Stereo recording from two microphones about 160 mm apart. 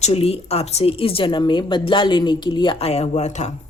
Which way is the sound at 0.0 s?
40° left (ahead or behind).